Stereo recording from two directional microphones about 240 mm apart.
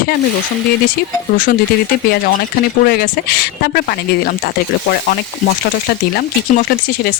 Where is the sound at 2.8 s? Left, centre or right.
Left.